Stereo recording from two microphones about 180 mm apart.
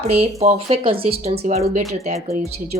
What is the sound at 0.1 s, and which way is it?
A woman's voice, 35° right (ahead or behind).